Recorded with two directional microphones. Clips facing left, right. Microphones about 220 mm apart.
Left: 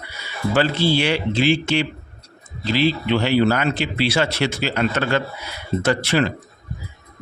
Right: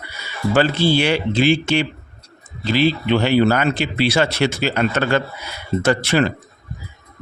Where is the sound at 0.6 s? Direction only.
50° right (ahead or behind).